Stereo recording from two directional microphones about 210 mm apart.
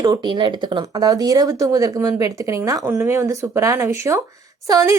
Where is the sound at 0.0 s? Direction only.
20° right (ahead or behind).